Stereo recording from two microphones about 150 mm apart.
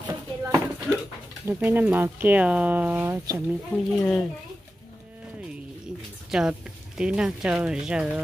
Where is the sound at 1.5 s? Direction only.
15° right (ahead or behind).